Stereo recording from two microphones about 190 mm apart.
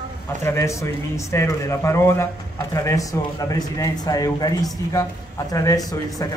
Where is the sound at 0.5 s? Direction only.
15° left (ahead or behind).